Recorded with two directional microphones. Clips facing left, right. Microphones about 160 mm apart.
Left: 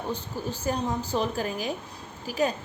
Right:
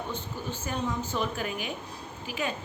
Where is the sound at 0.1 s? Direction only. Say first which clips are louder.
Left 3 dB; 35° left (ahead or behind).